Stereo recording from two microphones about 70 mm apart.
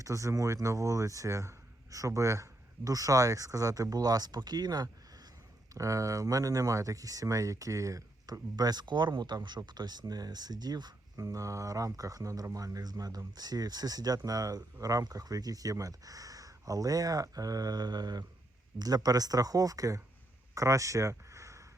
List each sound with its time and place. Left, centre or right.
0.0 s speech: right
5.7 s speech: right
11.2 s speech: right